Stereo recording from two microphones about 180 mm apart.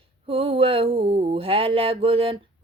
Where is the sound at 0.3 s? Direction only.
30° right (ahead or behind).